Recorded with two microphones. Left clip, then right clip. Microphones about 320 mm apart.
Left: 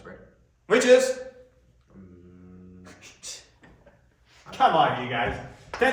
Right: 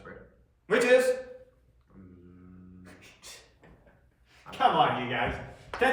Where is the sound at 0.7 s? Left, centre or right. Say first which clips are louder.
Left 4 dB; centre.